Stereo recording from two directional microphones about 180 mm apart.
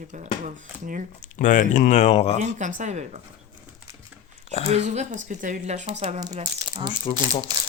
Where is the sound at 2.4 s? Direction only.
45° right (ahead or behind).